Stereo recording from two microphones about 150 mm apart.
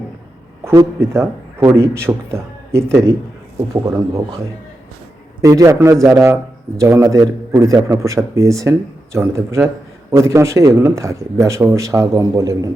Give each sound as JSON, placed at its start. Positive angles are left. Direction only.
{"t": 0.6, "sound": "a man's voice", "side_deg": -20}
{"t": 5.4, "sound": "a man's voice", "side_deg": -20}